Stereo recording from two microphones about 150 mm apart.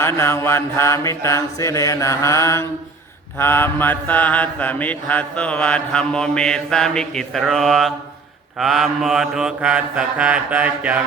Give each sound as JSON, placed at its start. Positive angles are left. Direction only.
{"t": 0.0, "sound": "mantra", "side_deg": 15}